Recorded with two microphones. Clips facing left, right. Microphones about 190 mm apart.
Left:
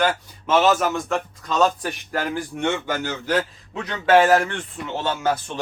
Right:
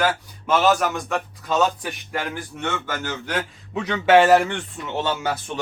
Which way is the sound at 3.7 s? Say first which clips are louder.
Right 1 dB; 20° right (ahead or behind).